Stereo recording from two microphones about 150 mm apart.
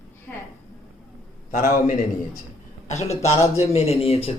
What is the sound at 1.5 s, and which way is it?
Speech, 65° left (ahead or behind).